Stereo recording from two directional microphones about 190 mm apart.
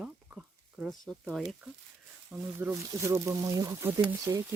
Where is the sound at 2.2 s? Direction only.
10° right (ahead or behind).